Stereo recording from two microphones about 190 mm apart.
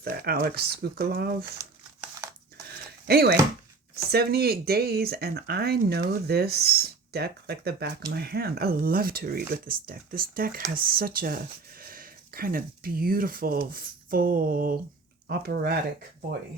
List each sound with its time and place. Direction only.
0.0 s speech: 55° right (ahead or behind)
3.1 s speech: 55° right (ahead or behind)